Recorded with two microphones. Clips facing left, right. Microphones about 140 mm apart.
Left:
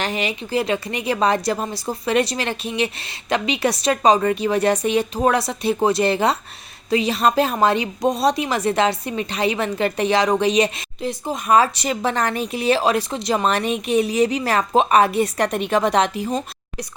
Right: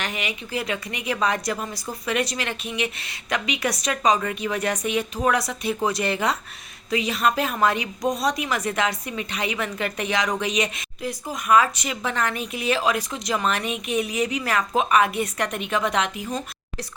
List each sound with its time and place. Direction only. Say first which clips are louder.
0.0 s a woman's voice: left 6 dB; 30° left (ahead or behind)